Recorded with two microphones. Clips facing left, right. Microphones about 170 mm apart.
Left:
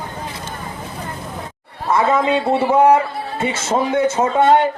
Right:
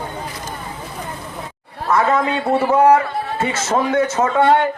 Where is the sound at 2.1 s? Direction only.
25° left (ahead or behind).